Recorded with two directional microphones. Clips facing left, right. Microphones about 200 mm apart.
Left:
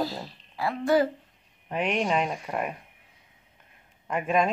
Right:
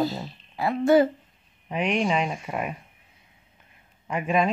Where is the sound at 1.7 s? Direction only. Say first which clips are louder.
Right 2 dB; centre (ahead or behind).